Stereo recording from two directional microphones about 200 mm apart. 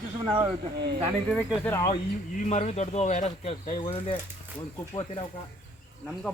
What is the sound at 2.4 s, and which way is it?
Speech, 35° left (ahead or behind).